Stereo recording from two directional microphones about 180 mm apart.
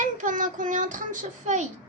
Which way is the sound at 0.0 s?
45° right (ahead or behind).